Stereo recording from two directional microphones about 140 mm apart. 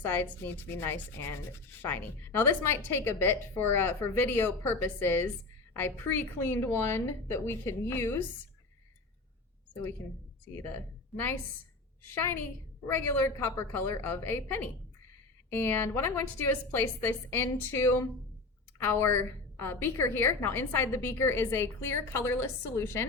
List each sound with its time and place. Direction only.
0.0 s a woman's voice: 15° left (ahead or behind)
10.5 s a woman's voice: 15° left (ahead or behind)